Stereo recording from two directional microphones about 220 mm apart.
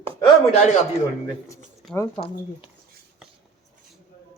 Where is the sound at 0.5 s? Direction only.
30° left (ahead or behind).